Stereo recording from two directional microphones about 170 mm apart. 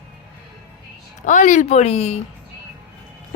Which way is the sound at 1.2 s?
45° left (ahead or behind).